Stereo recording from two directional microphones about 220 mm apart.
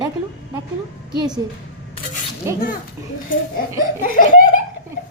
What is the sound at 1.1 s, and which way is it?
Speech, 20° right (ahead or behind).